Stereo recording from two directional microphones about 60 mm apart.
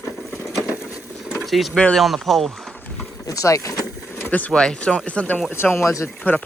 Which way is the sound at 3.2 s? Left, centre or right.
Left.